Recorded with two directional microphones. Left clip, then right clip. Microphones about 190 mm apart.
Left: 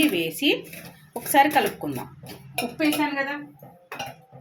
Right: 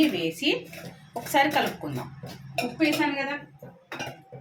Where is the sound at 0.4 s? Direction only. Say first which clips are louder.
Left 4 dB; 35° left (ahead or behind).